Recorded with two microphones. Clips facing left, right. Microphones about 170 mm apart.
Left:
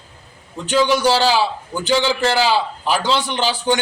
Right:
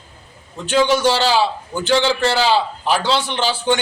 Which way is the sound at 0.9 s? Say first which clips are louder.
Even; 10° left (ahead or behind).